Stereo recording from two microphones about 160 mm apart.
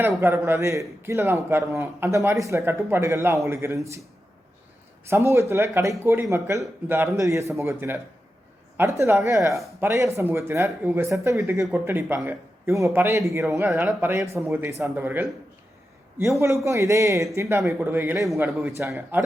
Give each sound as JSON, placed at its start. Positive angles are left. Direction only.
{"t": 0.2, "sound": "speech", "side_deg": -15}
{"t": 5.0, "sound": "speech", "side_deg": -15}